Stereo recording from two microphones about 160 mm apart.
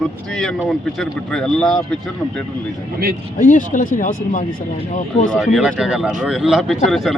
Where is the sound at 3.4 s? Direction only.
55° left (ahead or behind).